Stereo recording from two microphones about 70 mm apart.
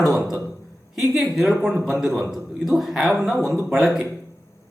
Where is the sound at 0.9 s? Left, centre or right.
Centre.